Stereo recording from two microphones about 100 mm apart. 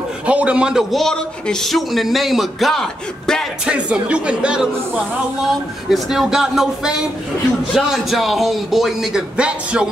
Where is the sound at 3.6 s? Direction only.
10° right (ahead or behind).